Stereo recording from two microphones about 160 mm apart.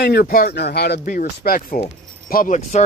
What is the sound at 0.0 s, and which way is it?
Speech, 80° left.